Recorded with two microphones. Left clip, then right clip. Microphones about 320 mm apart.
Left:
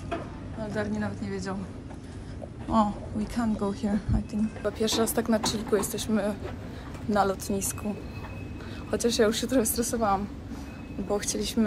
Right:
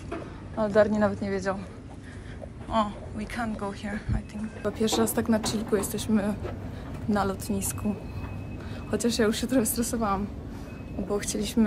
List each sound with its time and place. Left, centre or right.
0.7 s a woman's voice: centre
2.7 s a woman's voice: centre
4.6 s a woman's voice: centre
8.9 s a woman's voice: centre